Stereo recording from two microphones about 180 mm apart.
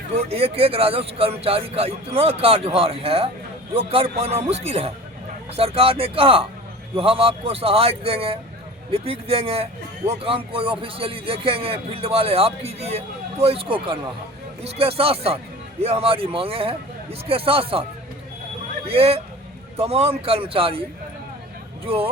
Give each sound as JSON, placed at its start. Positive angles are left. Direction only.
{"t": 0.1, "sound": "speech", "side_deg": -35}
{"t": 18.9, "sound": "speech", "side_deg": -35}
{"t": 21.8, "sound": "speech", "side_deg": -30}